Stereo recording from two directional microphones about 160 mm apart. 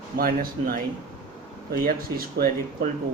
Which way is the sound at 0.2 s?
60° right (ahead or behind).